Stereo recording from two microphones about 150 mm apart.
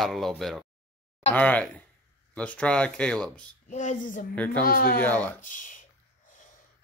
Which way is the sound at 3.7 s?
55° left (ahead or behind).